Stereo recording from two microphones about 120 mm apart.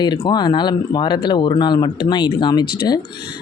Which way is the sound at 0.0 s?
40° left (ahead or behind).